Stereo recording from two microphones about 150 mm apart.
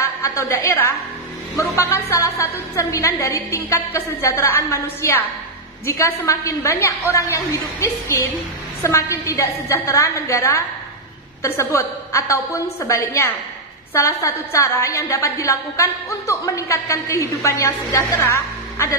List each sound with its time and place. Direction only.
0.0 s music: 20° left (ahead or behind)
1.6 s a woman's voice: 20° left (ahead or behind)